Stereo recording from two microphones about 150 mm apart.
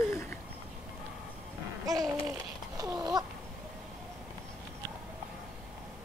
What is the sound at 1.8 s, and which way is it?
Babbling, 25° right (ahead or behind).